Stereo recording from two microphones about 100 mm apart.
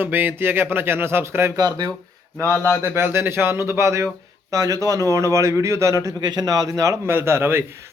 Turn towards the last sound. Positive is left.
turn(degrees=-25)  # may be behind; listen again after turning